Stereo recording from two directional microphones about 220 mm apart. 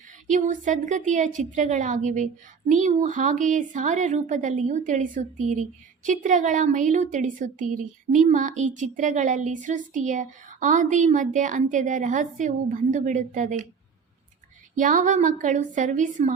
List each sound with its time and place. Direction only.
0.3 s a woman's voice: 35° right (ahead or behind)
14.8 s a woman's voice: 35° right (ahead or behind)